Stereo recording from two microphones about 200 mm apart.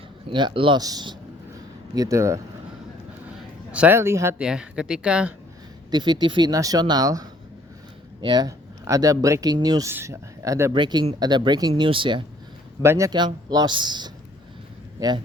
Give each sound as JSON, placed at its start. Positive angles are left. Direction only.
{"t": 0.3, "sound": "speech", "side_deg": -25}
{"t": 1.5, "sound": "a sound", "side_deg": -15}
{"t": 3.7, "sound": "speech", "side_deg": -10}
{"t": 5.9, "sound": "speech", "side_deg": -20}
{"t": 12.8, "sound": "a man's voice", "side_deg": -15}